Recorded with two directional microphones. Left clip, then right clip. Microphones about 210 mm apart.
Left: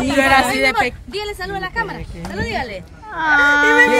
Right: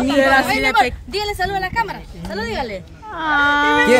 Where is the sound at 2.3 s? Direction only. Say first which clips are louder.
Even; centre (ahead or behind).